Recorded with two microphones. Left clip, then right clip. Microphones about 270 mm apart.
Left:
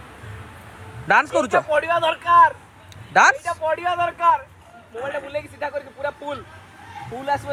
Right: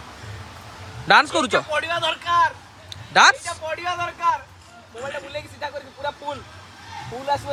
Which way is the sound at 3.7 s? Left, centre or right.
Centre.